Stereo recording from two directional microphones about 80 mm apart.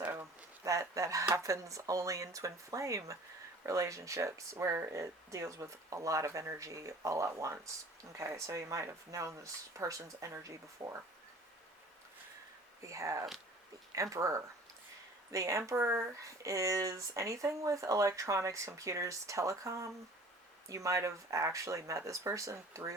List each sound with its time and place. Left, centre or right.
0.0 s a sound: right
0.6 s speech: right
12.8 s speech: right
15.8 s speech: right
16.2 s speech: right